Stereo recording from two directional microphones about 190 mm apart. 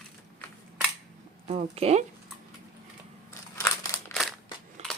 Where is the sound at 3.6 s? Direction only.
15° left (ahead or behind).